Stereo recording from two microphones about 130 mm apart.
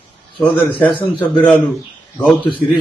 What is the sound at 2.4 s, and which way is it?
Speech, 40° left (ahead or behind).